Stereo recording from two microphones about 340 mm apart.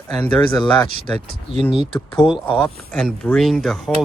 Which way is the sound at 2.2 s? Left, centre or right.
Centre.